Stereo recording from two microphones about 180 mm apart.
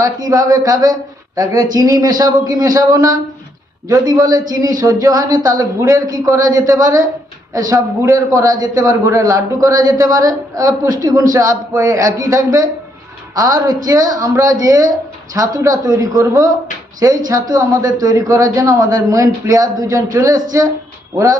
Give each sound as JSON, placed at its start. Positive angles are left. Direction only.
{"t": 0.0, "sound": "a man's voice", "side_deg": -20}